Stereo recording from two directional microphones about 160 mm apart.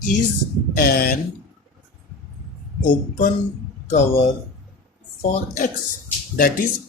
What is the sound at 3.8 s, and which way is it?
Speech, 45° left (ahead or behind).